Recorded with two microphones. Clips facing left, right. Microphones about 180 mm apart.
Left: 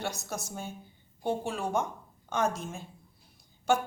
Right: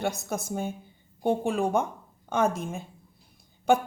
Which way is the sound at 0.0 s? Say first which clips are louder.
Right 6 dB; 55° right (ahead or behind).